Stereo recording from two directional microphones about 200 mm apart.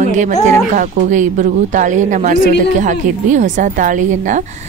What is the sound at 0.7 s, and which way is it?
Speech, 40° right (ahead or behind).